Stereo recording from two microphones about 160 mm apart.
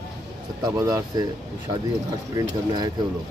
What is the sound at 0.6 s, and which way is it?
Speech, 20° right (ahead or behind).